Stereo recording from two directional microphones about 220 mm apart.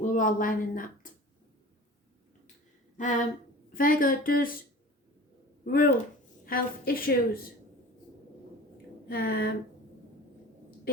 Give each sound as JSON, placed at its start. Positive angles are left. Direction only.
{"t": 0.0, "sound": "speech", "side_deg": 35}
{"t": 3.0, "sound": "speech", "side_deg": 35}
{"t": 5.6, "sound": "speech", "side_deg": 40}
{"t": 9.0, "sound": "speech", "side_deg": 45}